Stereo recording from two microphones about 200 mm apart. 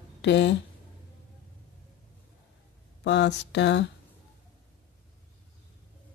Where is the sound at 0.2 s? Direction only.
60° left (ahead or behind).